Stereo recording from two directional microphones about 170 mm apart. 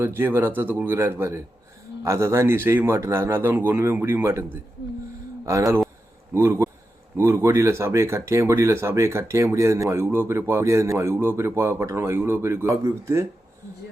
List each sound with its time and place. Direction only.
0.0 s speech: 15° right (ahead or behind)